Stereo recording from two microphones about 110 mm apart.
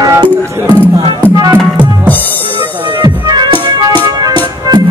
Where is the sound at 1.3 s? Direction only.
35° right (ahead or behind).